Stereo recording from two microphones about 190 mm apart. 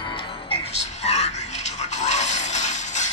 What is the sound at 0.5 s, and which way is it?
Music, 35° left (ahead or behind).